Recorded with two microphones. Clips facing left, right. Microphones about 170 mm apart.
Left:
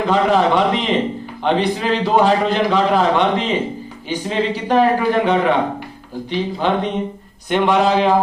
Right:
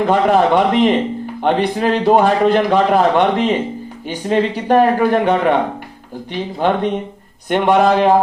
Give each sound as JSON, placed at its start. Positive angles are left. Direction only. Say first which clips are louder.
{"t": 0.1, "sound": "a man's voice", "louder": "right 1 dB", "side_deg": -55}